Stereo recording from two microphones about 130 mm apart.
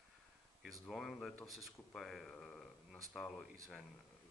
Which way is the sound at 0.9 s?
Centre (ahead or behind).